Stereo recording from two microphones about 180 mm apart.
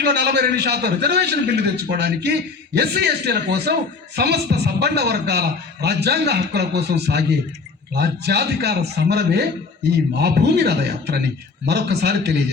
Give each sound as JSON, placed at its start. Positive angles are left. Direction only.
{"t": 0.0, "sound": "a man's voice", "side_deg": -65}